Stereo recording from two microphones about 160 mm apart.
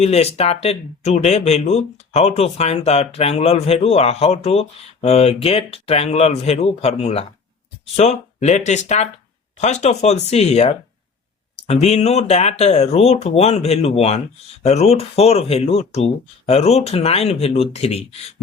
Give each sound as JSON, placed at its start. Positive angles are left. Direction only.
{"t": 0.0, "sound": "speech", "side_deg": 40}